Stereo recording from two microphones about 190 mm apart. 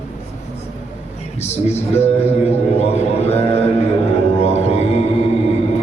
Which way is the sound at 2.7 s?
35° left (ahead or behind).